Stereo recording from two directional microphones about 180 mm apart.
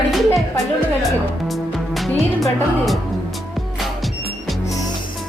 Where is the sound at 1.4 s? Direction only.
Centre (ahead or behind).